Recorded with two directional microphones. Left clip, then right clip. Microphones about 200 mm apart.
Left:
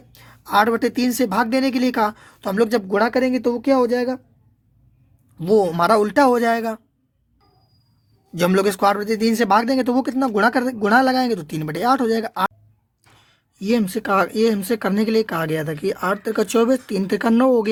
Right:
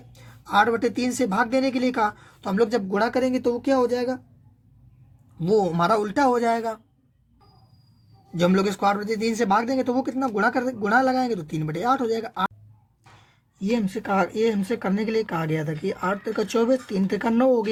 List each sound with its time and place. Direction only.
0.1 s a man's voice: 45° left (ahead or behind)
5.4 s speech: 45° left (ahead or behind)
8.4 s a man's voice: 45° left (ahead or behind)
13.7 s speech: 35° left (ahead or behind)